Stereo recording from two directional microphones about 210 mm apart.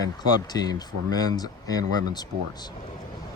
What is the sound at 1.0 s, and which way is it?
Speech, 15° left (ahead or behind).